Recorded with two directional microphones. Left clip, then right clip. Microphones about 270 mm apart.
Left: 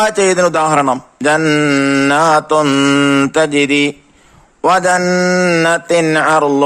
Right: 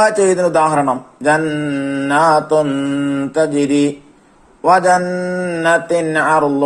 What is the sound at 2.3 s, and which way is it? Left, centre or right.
Mantra, left.